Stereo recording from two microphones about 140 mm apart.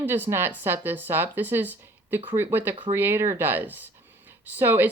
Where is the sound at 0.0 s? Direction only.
15° right (ahead or behind).